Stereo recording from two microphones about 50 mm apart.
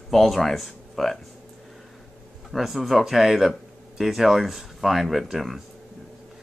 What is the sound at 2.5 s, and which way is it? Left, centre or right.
Speech, centre.